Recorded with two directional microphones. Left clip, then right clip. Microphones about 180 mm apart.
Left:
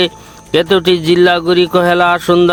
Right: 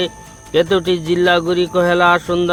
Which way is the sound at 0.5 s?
40° left (ahead or behind).